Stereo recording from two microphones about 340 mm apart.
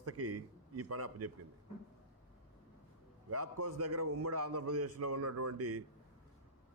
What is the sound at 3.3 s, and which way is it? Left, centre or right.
A man's voice, right.